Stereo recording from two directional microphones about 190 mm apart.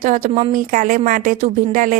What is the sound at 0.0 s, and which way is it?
Speech, 40° right (ahead or behind).